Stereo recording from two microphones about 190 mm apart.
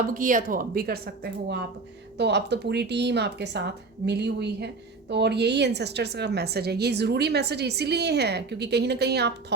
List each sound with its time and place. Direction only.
0.1 s speech: 45° right (ahead or behind); by 9.3 s 60° right (ahead or behind)